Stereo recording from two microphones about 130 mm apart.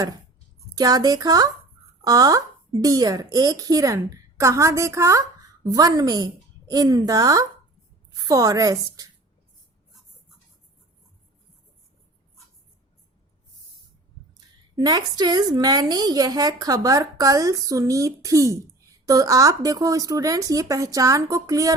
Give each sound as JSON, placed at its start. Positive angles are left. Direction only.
{"t": 0.8, "sound": "a woman's voice", "side_deg": -30}
{"t": 14.8, "sound": "a woman's voice", "side_deg": -30}